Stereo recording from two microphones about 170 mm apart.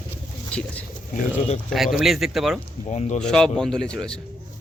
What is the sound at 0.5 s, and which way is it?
A man's voice, 10° left (ahead or behind).